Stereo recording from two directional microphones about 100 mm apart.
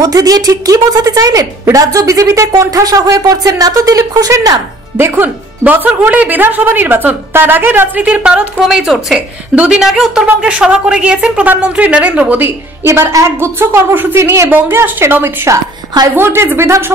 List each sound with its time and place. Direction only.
0.0 s speech: 40° right (ahead or behind)
4.9 s speech: 25° right (ahead or behind)
12.8 s a woman's voice: 25° right (ahead or behind)